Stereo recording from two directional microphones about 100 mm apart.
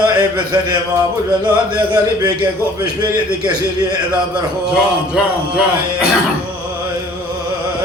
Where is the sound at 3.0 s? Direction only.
40° right (ahead or behind).